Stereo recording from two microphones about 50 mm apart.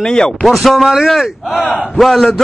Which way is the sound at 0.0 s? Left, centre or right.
Centre.